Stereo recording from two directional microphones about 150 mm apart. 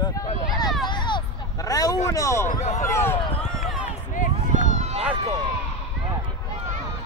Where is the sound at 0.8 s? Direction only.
30° left (ahead or behind).